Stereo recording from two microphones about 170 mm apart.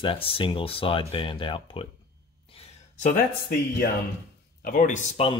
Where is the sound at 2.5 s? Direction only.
45° left (ahead or behind).